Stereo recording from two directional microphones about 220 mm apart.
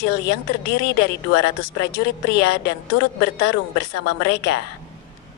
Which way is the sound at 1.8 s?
50° left (ahead or behind).